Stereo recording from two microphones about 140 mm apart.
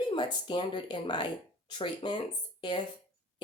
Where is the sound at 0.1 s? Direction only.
35° left (ahead or behind).